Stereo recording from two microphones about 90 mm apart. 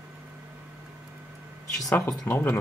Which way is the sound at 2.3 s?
25° left (ahead or behind).